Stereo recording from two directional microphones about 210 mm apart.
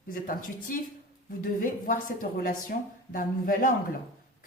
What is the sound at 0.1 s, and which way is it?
A woman's voice, 40° left (ahead or behind).